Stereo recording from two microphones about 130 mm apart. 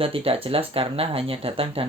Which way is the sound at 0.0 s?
45° right (ahead or behind).